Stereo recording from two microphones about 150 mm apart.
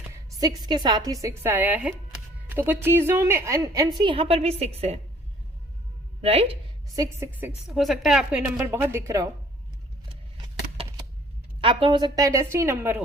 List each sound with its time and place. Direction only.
0.3 s a woman's voice: 25° right (ahead or behind)
4.0 s a woman's voice: 35° right (ahead or behind)
6.2 s a woman's voice: 40° right (ahead or behind)
6.9 s speech: 25° right (ahead or behind)
7.3 s a woman's voice: 10° right (ahead or behind)
7.7 s a woman's voice: centre (ahead or behind); by 9.3 s 20° right (ahead or behind)
11.6 s speech: 35° right (ahead or behind); by 13.0 s 15° right (ahead or behind)